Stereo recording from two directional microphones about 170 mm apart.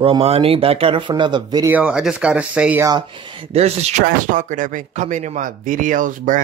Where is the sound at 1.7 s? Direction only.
5° right (ahead or behind).